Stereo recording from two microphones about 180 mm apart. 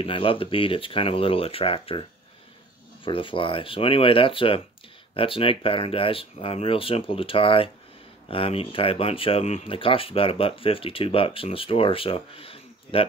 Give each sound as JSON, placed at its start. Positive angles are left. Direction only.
{"t": 0.0, "sound": "speech", "side_deg": 30}
{"t": 3.1, "sound": "speech", "side_deg": 30}